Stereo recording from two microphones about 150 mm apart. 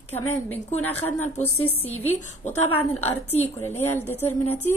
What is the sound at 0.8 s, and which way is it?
A woman's voice, 15° left (ahead or behind).